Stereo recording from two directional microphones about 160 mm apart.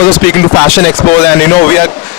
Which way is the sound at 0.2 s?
15° left (ahead or behind).